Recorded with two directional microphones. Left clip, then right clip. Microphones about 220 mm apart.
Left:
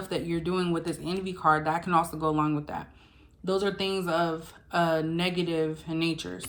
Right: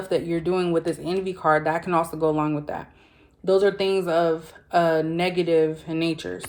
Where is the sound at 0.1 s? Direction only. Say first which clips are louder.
Right 7 dB; 15° left (ahead or behind).